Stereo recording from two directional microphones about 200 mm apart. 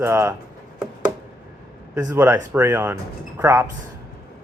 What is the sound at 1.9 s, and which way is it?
Speech, 15° right (ahead or behind).